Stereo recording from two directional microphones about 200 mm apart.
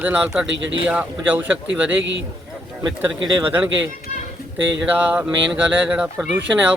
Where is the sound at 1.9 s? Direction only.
65° right (ahead or behind).